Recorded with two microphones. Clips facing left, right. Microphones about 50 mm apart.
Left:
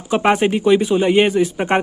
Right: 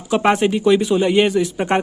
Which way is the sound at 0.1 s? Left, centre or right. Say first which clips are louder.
Even; centre.